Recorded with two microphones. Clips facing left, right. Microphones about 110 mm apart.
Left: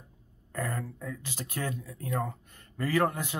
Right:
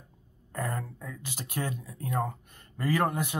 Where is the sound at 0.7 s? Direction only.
30° right (ahead or behind).